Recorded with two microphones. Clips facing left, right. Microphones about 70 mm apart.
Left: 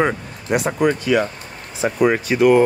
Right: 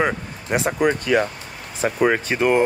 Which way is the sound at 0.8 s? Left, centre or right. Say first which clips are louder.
Left 1 dB; right.